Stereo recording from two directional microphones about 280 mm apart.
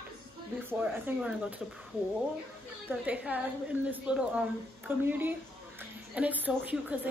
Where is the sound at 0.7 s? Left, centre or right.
Centre.